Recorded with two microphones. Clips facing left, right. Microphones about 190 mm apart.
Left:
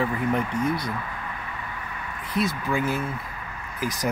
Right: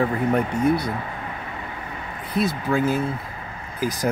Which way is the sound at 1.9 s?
30° right (ahead or behind).